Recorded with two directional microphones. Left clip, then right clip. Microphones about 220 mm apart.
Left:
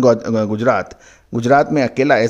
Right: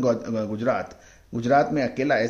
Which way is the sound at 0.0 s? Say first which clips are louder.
Left 10 dB; 45° left (ahead or behind).